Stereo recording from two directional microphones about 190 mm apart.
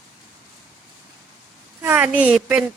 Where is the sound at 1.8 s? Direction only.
10° right (ahead or behind).